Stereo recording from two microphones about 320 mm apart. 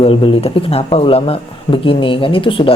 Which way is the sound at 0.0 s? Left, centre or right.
Centre.